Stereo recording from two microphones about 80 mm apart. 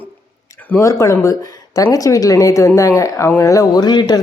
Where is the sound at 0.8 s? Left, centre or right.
Left.